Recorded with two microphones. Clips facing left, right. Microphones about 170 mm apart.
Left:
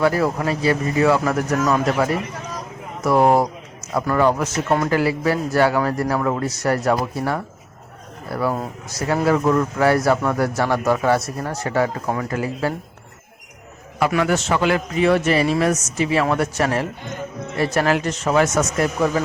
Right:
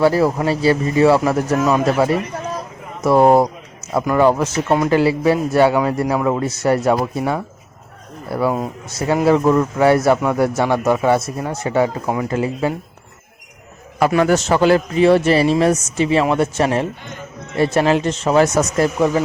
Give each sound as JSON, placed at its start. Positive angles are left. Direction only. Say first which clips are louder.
{"t": 0.0, "sound": "a man's voice", "louder": "right 4 dB", "side_deg": -30}
{"t": 14.1, "sound": "a man's voice", "louder": "right 5 dB", "side_deg": -35}